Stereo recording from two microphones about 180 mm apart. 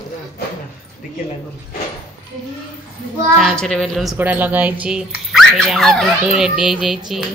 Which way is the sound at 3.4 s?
Centre (ahead or behind).